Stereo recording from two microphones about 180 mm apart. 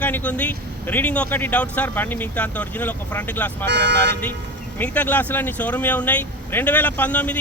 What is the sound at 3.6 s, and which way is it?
Speech, 70° right (ahead or behind).